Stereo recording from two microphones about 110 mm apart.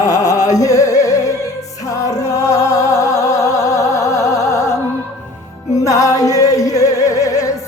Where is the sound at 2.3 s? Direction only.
30° left (ahead or behind).